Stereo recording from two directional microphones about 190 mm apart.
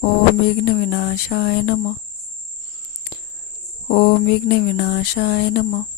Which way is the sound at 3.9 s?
50° left (ahead or behind).